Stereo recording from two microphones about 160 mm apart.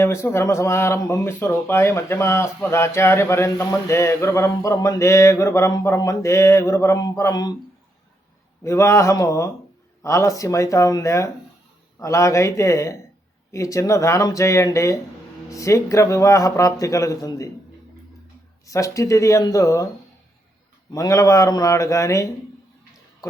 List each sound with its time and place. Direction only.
0.0 s speech: 15° left (ahead or behind)
8.6 s speech: 15° left (ahead or behind)
18.6 s speech: 20° left (ahead or behind)
20.9 s speech: 20° left (ahead or behind)